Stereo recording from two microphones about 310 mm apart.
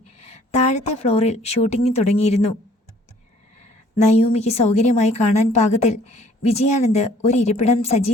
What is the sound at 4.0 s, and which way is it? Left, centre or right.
A woman's voice, left.